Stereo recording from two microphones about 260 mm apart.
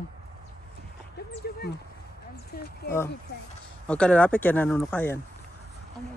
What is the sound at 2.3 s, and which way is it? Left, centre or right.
Speech, left.